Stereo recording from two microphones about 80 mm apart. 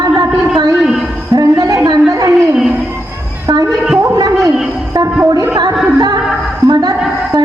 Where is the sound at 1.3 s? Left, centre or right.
Right.